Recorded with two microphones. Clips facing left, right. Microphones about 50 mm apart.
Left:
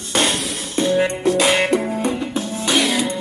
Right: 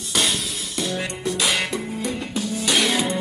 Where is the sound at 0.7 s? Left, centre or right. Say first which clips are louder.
Left 10 dB; left.